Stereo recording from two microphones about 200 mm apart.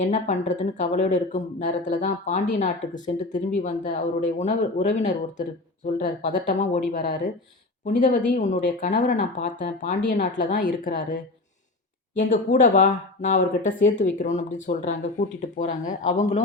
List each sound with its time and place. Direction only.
0.0 s speech: 35° left (ahead or behind)